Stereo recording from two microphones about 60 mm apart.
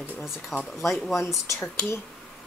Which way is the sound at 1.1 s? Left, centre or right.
Left.